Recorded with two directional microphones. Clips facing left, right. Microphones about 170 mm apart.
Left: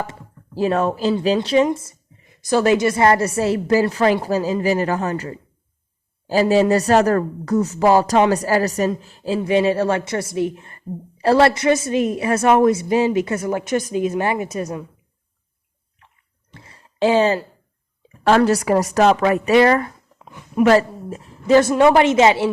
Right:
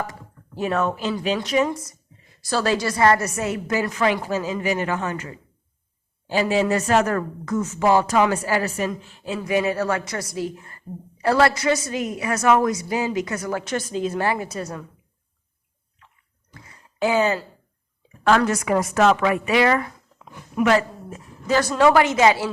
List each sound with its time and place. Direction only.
0.0 s speech: 30° left (ahead or behind)
16.5 s a sound: 30° left (ahead or behind)
18.3 s speech: 35° left (ahead or behind)